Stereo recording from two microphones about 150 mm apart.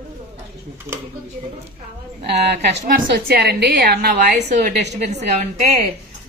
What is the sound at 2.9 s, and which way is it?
A woman's voice, 90° right.